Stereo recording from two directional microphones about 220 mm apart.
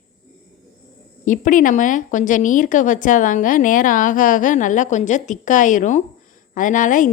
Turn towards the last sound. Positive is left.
turn(degrees=35)  # may be behind; listen again after turning